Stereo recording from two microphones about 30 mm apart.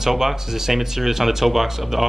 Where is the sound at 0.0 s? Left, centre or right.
Centre.